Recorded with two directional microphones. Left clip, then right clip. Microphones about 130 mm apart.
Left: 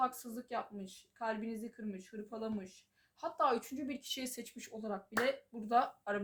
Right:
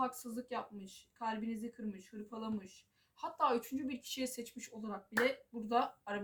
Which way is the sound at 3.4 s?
40° left (ahead or behind).